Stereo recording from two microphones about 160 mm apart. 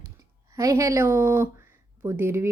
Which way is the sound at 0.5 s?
20° right (ahead or behind).